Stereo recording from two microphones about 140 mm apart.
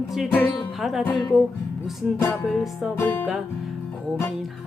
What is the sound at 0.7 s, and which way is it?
A woman's voice, centre (ahead or behind).